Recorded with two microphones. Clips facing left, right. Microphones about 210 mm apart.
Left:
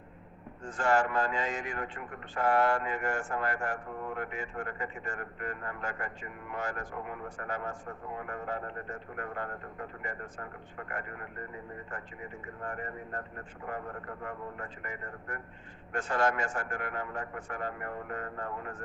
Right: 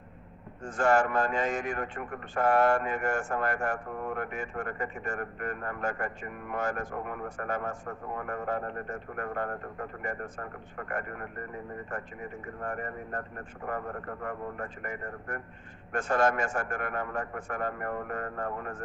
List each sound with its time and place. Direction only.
0.6 s a man's voice: 45° right (ahead or behind)
12.6 s a man's voice: 45° right (ahead or behind)
14.3 s a man's voice: 45° right (ahead or behind)